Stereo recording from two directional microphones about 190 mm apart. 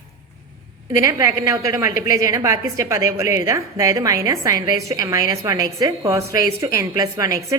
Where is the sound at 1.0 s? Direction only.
15° right (ahead or behind).